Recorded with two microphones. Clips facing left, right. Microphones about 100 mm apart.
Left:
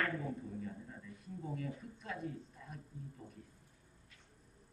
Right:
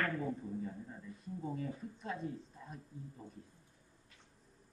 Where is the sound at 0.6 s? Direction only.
25° right (ahead or behind).